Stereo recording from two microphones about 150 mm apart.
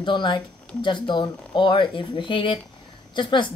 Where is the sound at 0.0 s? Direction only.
30° left (ahead or behind).